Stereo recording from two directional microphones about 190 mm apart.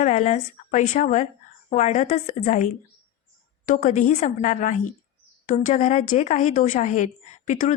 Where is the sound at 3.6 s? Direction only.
40° left (ahead or behind).